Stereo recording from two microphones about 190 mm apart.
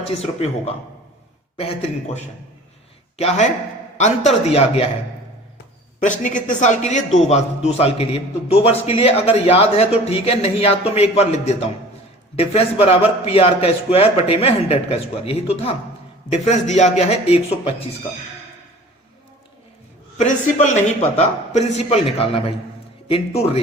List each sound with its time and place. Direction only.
0.0 s a man's voice: 30° left (ahead or behind)
6.0 s a man's voice: 40° left (ahead or behind)
20.1 s a man's voice: 40° left (ahead or behind)